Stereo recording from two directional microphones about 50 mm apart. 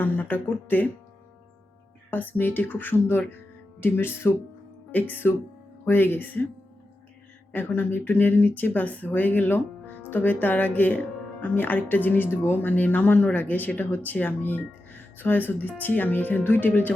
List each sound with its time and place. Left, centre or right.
0.0 s speech: left
2.0 s speech: left
4.9 s speech: left
7.5 s speech: left
12.6 s speech: left